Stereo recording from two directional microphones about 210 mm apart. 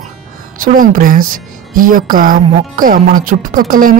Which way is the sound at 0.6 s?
40° right (ahead or behind).